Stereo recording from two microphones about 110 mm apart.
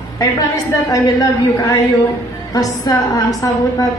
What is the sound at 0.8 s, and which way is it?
A man's voice, 35° left (ahead or behind).